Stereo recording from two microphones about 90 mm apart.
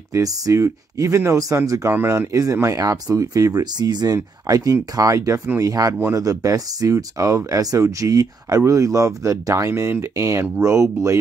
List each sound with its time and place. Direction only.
0.1 s speech: 35° right (ahead or behind)